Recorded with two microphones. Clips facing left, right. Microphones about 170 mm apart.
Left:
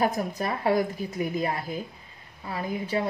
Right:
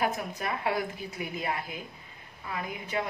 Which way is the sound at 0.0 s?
35° left (ahead or behind).